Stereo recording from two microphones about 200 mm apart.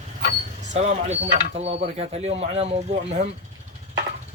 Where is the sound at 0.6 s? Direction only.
35° right (ahead or behind).